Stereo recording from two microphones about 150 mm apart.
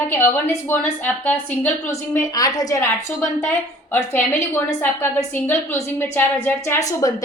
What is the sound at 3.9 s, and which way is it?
A woman's voice, 15° left (ahead or behind).